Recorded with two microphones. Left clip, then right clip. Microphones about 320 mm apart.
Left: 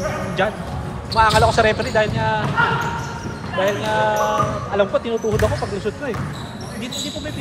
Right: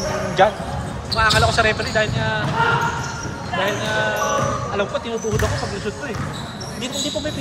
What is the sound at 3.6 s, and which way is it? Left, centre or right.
Speech, centre.